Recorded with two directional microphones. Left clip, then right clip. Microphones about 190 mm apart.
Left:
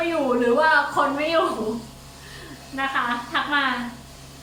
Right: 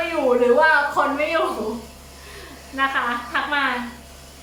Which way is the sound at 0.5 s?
Centre (ahead or behind).